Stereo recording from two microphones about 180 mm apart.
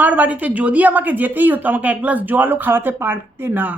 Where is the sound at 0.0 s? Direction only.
10° right (ahead or behind).